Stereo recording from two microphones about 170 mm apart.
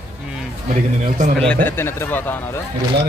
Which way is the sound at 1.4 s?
10° left (ahead or behind).